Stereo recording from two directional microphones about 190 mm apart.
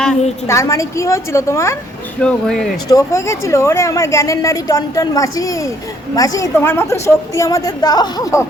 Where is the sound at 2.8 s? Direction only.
15° left (ahead or behind).